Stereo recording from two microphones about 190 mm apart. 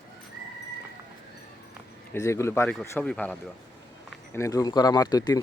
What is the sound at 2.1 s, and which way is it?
Speech, 15° left (ahead or behind).